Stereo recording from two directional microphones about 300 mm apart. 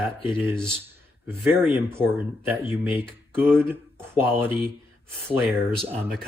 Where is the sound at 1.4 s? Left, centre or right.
Centre.